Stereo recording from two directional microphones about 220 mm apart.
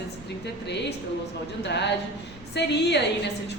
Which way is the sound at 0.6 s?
50° left (ahead or behind).